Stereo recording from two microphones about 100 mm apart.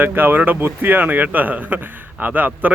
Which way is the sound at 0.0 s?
20° right (ahead or behind).